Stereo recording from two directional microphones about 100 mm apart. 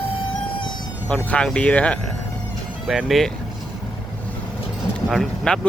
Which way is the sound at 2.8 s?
Centre (ahead or behind).